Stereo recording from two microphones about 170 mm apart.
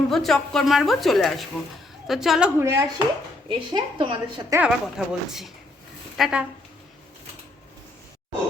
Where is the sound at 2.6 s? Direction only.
15° right (ahead or behind).